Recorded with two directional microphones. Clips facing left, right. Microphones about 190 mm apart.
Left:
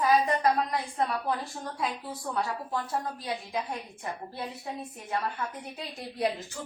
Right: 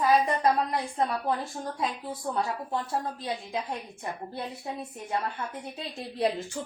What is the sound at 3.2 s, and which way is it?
Speech, 25° right (ahead or behind).